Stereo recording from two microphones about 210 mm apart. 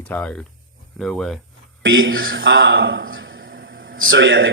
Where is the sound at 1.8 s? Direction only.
65° right (ahead or behind).